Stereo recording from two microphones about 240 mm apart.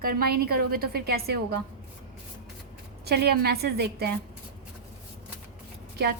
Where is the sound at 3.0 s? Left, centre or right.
Right.